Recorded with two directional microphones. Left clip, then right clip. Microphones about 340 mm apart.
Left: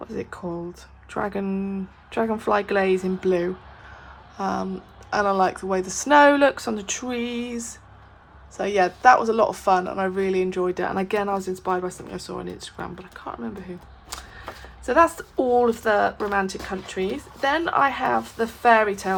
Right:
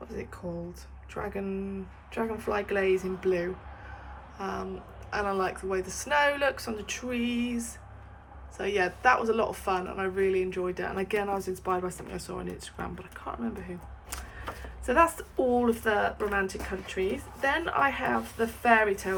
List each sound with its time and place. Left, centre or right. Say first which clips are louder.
0.1 s speech: left 6 dB; centre
14.8 s a woman's voice: left 5 dB; centre